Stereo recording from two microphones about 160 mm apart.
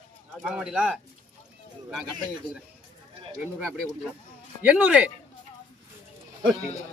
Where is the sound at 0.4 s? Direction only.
5° right (ahead or behind).